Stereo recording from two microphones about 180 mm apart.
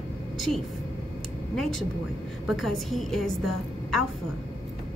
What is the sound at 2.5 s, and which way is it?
A woman's voice, centre (ahead or behind).